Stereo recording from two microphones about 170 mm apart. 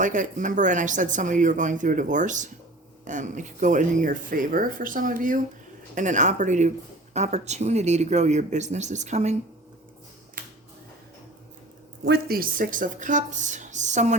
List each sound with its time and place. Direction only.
0.0 s speech: 50° right (ahead or behind)
10.4 s a sound: 55° right (ahead or behind)
12.0 s speech: 65° right (ahead or behind); by 14.2 s 45° right (ahead or behind)